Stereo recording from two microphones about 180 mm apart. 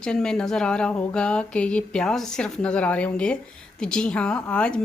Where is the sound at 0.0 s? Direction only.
5° left (ahead or behind).